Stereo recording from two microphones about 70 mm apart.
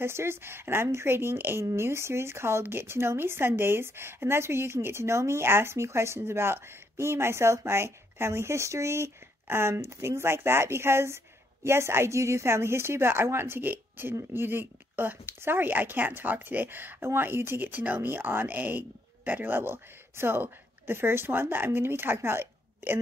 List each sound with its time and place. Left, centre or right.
0.0 s a woman's voice: right